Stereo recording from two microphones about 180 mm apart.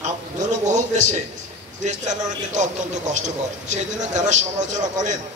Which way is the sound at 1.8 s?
40° right (ahead or behind).